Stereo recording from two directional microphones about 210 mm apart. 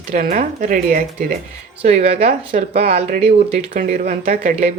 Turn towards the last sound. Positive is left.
turn(degrees=-35)  # may be behind; listen again after turning